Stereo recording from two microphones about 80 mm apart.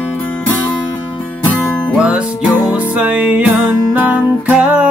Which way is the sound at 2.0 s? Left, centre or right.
Centre.